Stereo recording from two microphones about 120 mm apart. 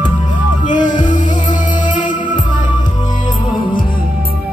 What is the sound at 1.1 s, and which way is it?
Music, 90° left.